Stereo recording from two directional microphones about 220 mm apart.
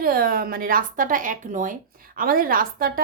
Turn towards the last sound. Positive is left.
turn(degrees=-40)  # may be behind; listen again after turning